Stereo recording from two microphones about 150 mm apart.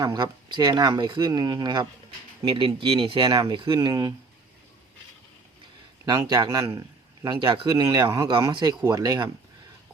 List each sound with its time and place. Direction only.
0.0 s speech: 25° right (ahead or behind)
6.1 s a man's voice: 25° right (ahead or behind)
7.3 s speech: 35° right (ahead or behind)